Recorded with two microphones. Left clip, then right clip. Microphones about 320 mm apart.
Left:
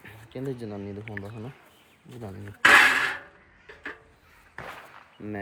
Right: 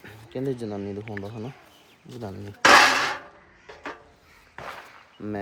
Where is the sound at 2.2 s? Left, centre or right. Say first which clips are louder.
Right 2 dB; centre.